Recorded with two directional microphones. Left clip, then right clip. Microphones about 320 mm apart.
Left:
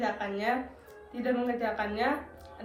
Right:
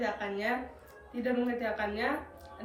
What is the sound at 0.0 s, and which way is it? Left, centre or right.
A woman's voice, centre.